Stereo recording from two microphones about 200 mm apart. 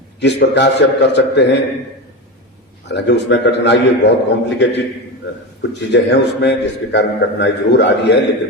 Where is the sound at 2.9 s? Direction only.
60° left (ahead or behind).